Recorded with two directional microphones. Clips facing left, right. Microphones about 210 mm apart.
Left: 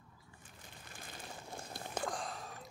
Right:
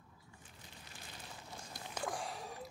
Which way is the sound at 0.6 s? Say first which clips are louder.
Left 3 dB; 50° left (ahead or behind).